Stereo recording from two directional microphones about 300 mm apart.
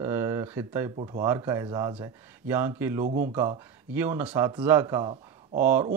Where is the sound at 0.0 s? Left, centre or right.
Centre.